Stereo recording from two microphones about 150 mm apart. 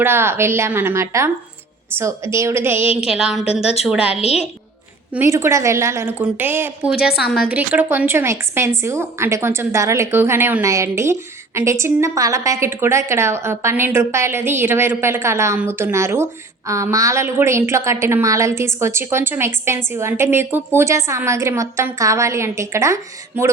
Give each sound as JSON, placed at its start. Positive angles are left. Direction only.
{"t": 0.0, "sound": "a woman's voice", "side_deg": -15}
{"t": 3.1, "sound": "a woman's voice", "side_deg": -5}
{"t": 4.1, "sound": "a woman's voice", "side_deg": 45}
{"t": 5.1, "sound": "a woman's voice", "side_deg": -15}
{"t": 6.9, "sound": "a woman's voice", "side_deg": 90}
{"t": 7.4, "sound": "a woman's voice", "side_deg": -10}